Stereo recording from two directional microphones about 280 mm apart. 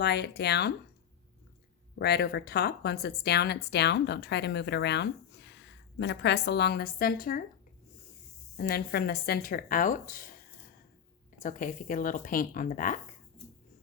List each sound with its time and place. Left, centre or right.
0.0 s a woman's voice: left
2.0 s a woman's voice: left
8.5 s a woman's voice: left
11.4 s speech: left